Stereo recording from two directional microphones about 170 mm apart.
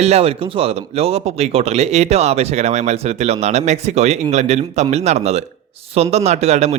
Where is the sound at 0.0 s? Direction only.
35° right (ahead or behind).